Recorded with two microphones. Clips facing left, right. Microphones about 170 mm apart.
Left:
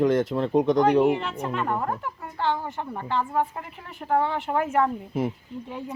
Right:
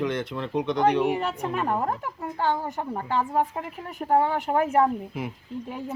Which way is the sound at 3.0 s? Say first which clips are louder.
Even; 10° right (ahead or behind).